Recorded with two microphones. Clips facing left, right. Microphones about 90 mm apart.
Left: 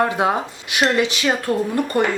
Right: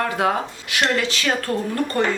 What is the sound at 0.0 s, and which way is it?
A woman's voice, 20° left (ahead or behind).